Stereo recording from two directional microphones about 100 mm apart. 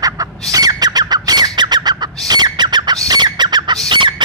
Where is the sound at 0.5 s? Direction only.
35° right (ahead or behind).